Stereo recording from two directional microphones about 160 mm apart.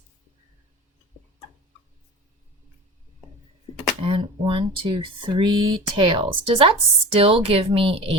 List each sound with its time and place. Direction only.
4.0 s speech: 35° right (ahead or behind)